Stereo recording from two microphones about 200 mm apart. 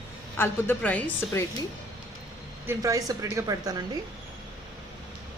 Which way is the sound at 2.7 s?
15° right (ahead or behind).